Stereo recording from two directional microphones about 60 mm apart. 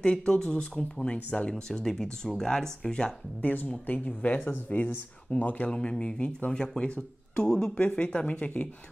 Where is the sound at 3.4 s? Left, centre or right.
Left.